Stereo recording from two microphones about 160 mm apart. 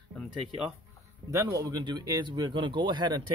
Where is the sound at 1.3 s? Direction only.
20° right (ahead or behind).